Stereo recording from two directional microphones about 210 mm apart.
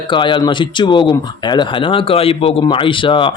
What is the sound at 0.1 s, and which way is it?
Speech, 20° left (ahead or behind).